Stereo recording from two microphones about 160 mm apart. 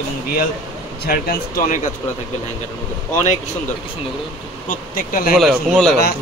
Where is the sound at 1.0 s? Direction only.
75° left (ahead or behind).